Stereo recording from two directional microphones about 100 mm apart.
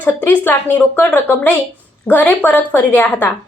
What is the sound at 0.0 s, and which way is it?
A woman's voice, 15° left (ahead or behind).